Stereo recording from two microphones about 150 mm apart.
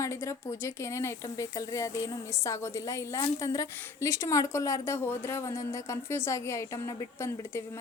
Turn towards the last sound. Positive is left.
turn(degrees=20)  # may be behind; listen again after turning